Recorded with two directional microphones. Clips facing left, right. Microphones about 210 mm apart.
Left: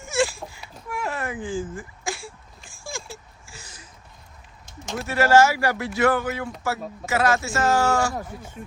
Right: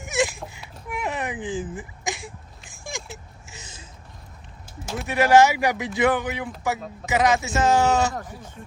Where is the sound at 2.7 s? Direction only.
20° right (ahead or behind).